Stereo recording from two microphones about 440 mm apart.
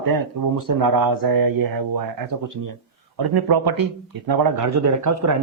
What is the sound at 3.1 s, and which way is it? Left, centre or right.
Speech, right.